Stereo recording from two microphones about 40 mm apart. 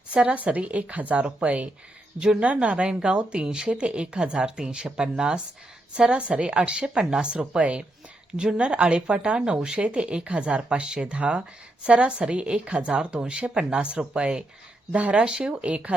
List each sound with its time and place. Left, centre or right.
0.1 s a woman's voice: right